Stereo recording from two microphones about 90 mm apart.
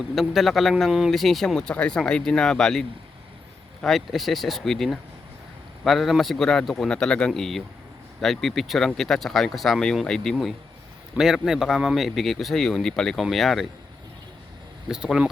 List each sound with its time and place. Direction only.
0.2 s speech: centre (ahead or behind)
14.8 s speech: 10° right (ahead or behind)